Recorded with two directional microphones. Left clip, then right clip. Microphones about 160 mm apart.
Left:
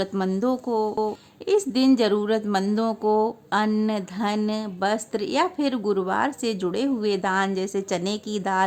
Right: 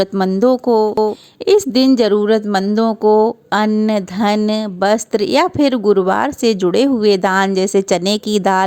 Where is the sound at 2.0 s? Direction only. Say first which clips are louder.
Right 9 dB; 35° right (ahead or behind).